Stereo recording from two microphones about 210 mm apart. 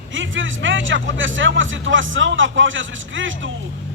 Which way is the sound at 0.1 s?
65° right (ahead or behind).